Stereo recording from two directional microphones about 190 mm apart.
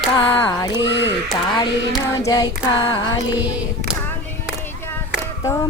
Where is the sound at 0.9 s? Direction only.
65° left (ahead or behind).